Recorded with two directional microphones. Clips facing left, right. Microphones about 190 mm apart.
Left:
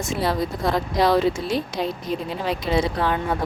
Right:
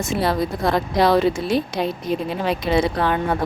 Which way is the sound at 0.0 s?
65° right (ahead or behind).